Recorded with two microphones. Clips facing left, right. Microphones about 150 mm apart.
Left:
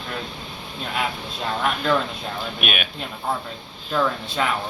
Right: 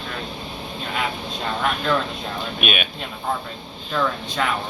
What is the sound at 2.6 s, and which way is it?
Speech, 5° left (ahead or behind).